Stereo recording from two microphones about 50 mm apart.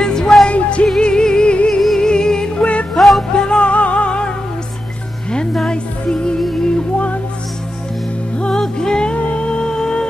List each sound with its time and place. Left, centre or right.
0.0 s music: centre
2.9 s music: centre
3.3 s music: centre
5.7 s music: centre
8.4 s music: centre